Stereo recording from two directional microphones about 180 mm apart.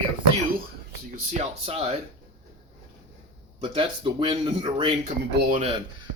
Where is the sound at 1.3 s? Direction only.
35° right (ahead or behind).